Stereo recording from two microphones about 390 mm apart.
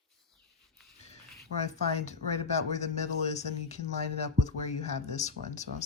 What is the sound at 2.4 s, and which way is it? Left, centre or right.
Speech, centre.